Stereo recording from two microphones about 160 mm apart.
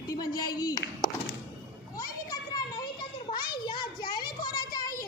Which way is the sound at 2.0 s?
25° left (ahead or behind).